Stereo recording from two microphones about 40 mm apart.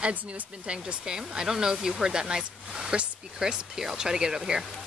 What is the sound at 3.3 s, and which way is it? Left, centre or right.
Speech, centre.